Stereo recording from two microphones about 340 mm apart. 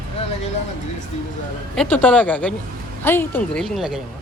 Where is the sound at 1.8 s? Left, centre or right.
Centre.